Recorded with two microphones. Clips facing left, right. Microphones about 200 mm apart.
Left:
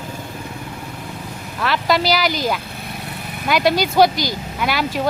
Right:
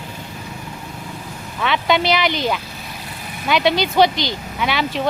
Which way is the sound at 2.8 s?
60° left (ahead or behind).